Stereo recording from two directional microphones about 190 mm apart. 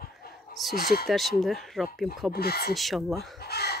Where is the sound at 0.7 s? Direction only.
50° left (ahead or behind).